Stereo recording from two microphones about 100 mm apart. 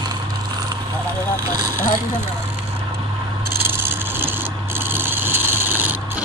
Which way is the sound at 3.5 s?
25° right (ahead or behind).